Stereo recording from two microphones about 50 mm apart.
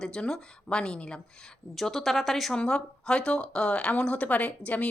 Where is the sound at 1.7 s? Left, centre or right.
Centre.